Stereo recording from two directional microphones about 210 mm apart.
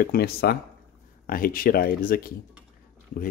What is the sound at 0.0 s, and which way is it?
Speech, 45° left (ahead or behind).